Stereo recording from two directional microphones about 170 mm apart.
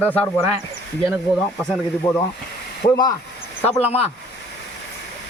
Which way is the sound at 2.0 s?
20° left (ahead or behind).